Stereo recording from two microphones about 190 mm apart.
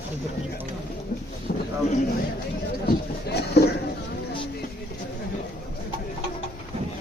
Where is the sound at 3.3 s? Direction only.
60° left (ahead or behind).